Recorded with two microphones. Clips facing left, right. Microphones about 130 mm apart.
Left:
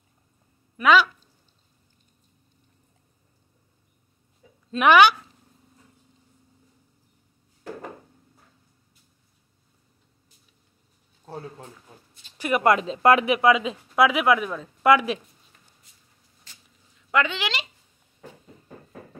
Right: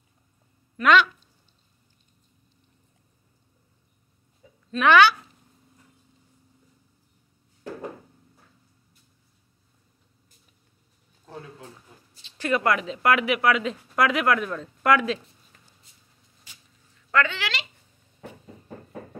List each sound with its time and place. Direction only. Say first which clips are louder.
0.8 s speech: left 1 dB; 5° left (ahead or behind)
4.7 s speech: left 1 dB; 15° left (ahead or behind)
11.2 s speech: left 4 dB; 35° left (ahead or behind)
12.4 s speech: left 3 dB; 15° left (ahead or behind)
12.7 s speech: left 4 dB; 30° left (ahead or behind)
13.9 s speech: left 3 dB; 5° left (ahead or behind)
16.5 s a sound: even; 10° right (ahead or behind)
16.9 s a sound: even; 15° left (ahead or behind)